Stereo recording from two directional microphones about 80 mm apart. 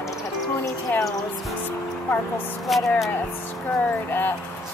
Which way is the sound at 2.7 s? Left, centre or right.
Centre.